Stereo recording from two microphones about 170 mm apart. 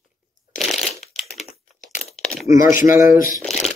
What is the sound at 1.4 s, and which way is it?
Crumpling, 45° left (ahead or behind).